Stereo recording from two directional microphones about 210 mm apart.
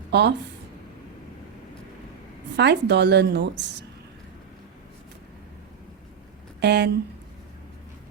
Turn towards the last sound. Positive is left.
turn(degrees=-55)  # may be behind; listen again after turning